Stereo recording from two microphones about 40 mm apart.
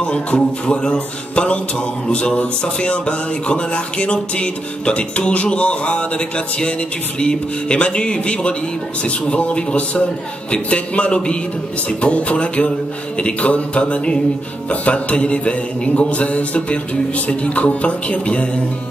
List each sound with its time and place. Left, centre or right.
0.0 s music: left
12.0 s mantra: left